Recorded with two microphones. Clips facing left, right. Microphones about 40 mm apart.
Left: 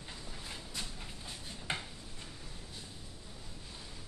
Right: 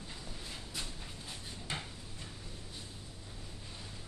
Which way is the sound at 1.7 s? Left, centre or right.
Left.